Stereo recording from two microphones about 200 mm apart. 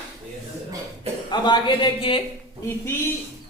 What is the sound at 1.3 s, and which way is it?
Speech, 20° left (ahead or behind).